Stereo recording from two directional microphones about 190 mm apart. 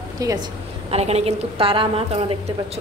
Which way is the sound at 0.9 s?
35° right (ahead or behind).